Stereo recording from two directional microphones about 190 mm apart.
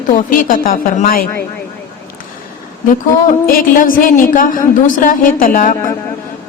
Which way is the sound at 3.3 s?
50° left (ahead or behind).